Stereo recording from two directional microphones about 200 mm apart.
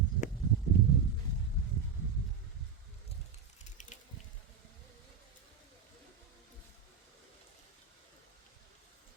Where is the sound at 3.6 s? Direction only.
40° left (ahead or behind).